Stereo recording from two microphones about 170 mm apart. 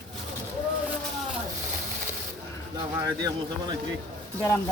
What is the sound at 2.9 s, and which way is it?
Speech, 20° right (ahead or behind).